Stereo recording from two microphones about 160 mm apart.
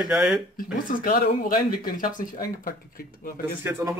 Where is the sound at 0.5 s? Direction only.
60° left (ahead or behind).